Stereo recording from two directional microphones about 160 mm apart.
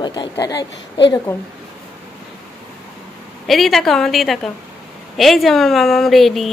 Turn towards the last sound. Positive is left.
turn(degrees=0)  # may be behind; listen again after turning